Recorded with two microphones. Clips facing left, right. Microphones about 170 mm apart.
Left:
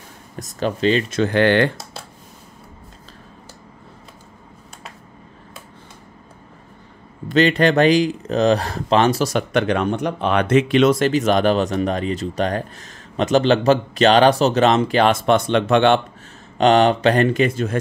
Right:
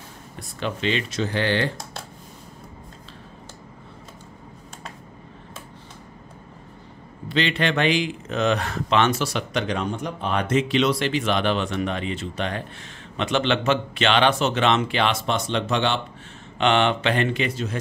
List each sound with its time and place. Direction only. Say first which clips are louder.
0.4 s speech: left 7 dB; 40° left (ahead or behind)
1.2 s speech: left 8 dB; 60° left (ahead or behind)
7.2 s speech: left 8 dB; 45° left (ahead or behind)
16.5 s speech: left 6 dB; 40° left (ahead or behind)